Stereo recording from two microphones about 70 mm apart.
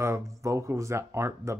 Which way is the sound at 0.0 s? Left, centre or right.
Right.